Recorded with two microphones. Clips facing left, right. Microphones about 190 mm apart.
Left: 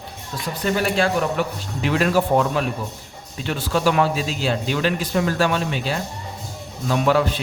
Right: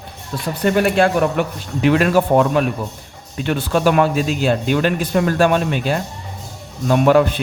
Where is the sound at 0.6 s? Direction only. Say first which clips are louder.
Right 5 dB; 55° right (ahead or behind).